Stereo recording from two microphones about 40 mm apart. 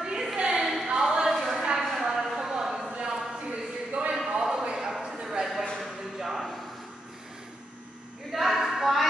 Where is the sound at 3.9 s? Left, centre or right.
Right.